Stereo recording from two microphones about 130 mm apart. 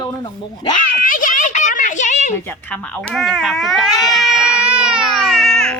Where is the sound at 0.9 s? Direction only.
90° left; by 2.3 s 65° left (ahead or behind).